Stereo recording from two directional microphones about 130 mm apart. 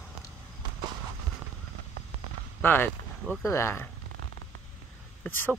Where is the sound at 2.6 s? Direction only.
15° left (ahead or behind).